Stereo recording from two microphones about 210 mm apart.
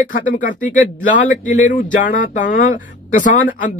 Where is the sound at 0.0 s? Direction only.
40° left (ahead or behind).